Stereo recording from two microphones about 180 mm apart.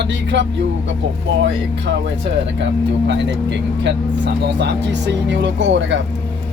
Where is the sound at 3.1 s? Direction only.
75° right (ahead or behind).